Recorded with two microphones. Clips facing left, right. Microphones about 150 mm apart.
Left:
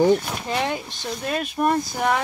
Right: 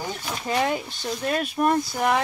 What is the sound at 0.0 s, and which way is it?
Speech, 55° left (ahead or behind).